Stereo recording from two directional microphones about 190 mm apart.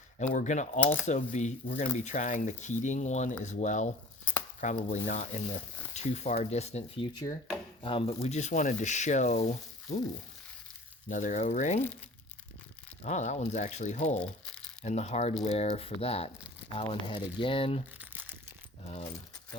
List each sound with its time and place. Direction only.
0.2 s speech: 40° left (ahead or behind)
11.1 s speech: 40° left (ahead or behind)
13.0 s speech: 40° left (ahead or behind)
14.2 s crumpling: 5° left (ahead or behind)
14.8 s speech: 35° left (ahead or behind)
18.0 s a sound: 10° right (ahead or behind)